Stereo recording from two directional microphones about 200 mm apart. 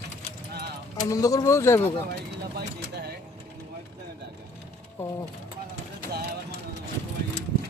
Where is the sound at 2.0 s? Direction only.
55° right (ahead or behind).